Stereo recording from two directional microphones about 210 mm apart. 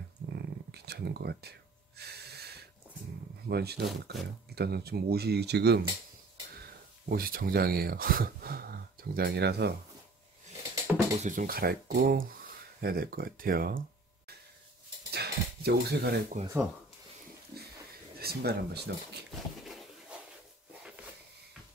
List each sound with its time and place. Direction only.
0.3 s gasp: 50° right (ahead or behind)
3.4 s speech: 50° right (ahead or behind)
7.1 s speech: 45° right (ahead or behind)
10.9 s music: centre (ahead or behind)
11.2 s speech: 40° right (ahead or behind)
15.0 s dishes: 50° right (ahead or behind)
18.2 s speech: 50° right (ahead or behind)
19.6 s a sound: centre (ahead or behind)